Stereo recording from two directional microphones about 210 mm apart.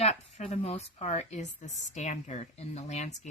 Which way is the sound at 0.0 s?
30° left (ahead or behind).